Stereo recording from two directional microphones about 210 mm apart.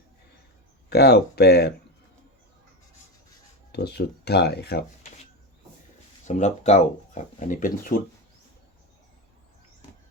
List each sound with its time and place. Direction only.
0.9 s speech: 50° left (ahead or behind)
3.7 s speech: 50° left (ahead or behind)
6.2 s speech: 35° left (ahead or behind)